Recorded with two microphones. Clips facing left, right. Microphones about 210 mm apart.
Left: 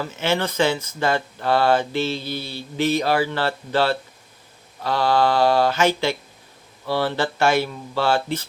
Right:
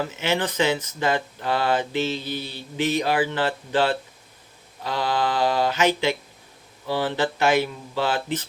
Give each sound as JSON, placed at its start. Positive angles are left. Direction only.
{"t": 0.0, "sound": "mantra", "side_deg": -15}